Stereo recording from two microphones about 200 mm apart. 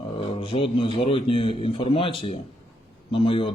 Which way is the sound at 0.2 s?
25° left (ahead or behind).